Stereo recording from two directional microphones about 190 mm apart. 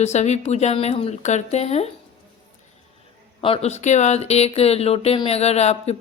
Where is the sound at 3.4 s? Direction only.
30° left (ahead or behind).